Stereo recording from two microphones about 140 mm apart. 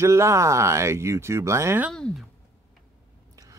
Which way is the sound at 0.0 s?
20° right (ahead or behind).